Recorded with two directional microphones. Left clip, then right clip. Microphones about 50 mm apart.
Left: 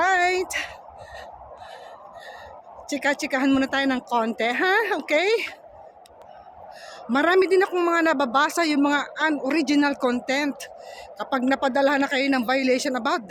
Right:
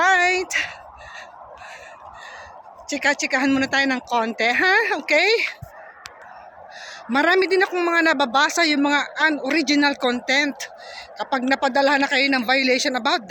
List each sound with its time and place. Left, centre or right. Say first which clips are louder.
0.0 s a sound: right 3 dB; left
0.4 s a sound: right 5 dB; centre
2.8 s speech: right 3 dB; left
4.7 s speech: right 3 dB; left
7.3 s speech: right 1 dB; left
7.9 s speech: right 5 dB; centre
8.3 s speech: right 3 dB; left
8.9 s a man's voice: right 4 dB; centre
9.4 s speech: right 3 dB; left
10.2 s speech: right 5 dB; left
11.4 s speech: right 2 dB; left
12.2 s speech: right 3 dB; left
12.5 s a man's voice: right 3 dB; left